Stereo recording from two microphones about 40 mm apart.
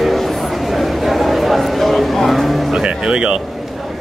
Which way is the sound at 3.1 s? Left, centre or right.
Right.